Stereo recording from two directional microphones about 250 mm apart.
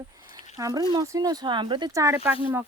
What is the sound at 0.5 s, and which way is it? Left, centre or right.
Speech, centre.